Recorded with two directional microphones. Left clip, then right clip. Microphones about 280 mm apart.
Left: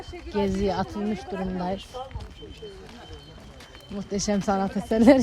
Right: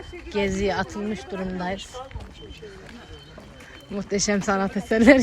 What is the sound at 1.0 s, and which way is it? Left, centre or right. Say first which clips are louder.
Speech: even; left.